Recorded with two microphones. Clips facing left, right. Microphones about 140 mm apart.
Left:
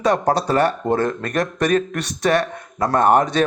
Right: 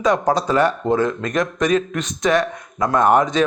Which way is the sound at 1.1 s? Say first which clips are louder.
Right 1 dB; 35° left (ahead or behind).